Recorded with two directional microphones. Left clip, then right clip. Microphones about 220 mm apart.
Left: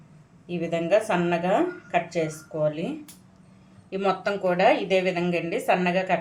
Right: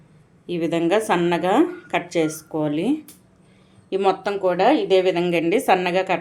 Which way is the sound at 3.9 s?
35° right (ahead or behind).